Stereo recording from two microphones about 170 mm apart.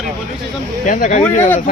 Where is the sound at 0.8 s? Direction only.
50° left (ahead or behind).